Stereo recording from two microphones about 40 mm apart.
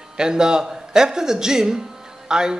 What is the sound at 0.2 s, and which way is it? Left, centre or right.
A man's voice, centre.